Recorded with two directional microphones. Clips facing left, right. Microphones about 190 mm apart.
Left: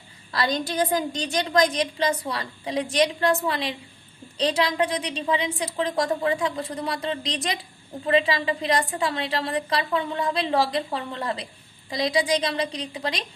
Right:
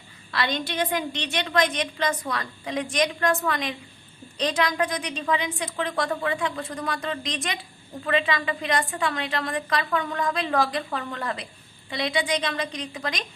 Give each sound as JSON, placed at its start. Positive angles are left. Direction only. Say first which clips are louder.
{"t": 0.3, "sound": "a woman's voice", "louder": "left 2 dB", "side_deg": 40}